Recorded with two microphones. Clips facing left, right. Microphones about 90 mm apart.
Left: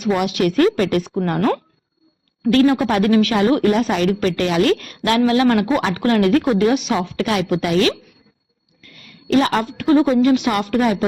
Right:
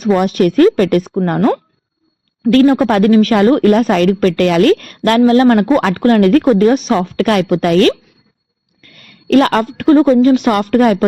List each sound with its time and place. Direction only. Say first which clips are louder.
0.0 s a woman's voice: right 6 dB; 40° right (ahead or behind)
1.4 s speech: right 5 dB; 25° right (ahead or behind)
2.4 s a woman's voice: right 5 dB; 45° right (ahead or behind)